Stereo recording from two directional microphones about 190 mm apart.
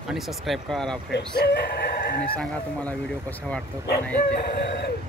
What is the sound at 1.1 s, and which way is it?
Speech, 60° left (ahead or behind).